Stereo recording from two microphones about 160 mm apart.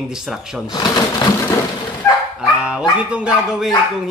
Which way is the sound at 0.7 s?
25° left (ahead or behind).